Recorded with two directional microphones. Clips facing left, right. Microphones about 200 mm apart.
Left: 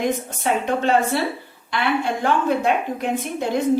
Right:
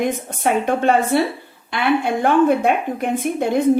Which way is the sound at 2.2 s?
55° right (ahead or behind).